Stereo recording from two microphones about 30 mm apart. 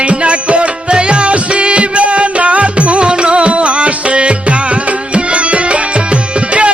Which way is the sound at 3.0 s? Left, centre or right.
Right.